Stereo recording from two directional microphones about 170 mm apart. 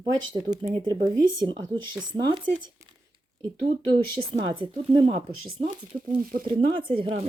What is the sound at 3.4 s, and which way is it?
A woman's voice, 30° right (ahead or behind).